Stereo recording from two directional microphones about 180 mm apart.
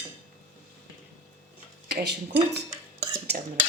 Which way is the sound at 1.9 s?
70° right (ahead or behind).